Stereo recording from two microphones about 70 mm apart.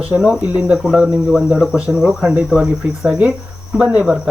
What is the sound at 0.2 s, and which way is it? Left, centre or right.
Speech, centre.